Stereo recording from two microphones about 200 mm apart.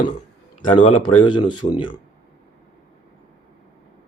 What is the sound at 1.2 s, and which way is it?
Speech, 25° left (ahead or behind).